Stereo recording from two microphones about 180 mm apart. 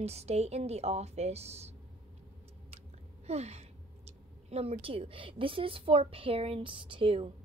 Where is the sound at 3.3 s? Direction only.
35° right (ahead or behind).